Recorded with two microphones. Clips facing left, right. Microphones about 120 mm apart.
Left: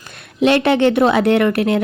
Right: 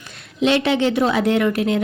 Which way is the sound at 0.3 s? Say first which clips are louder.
Left 4 dB; 55° left (ahead or behind).